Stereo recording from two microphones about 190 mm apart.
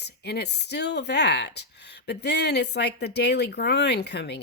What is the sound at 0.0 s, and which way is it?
Speech, 60° left (ahead or behind).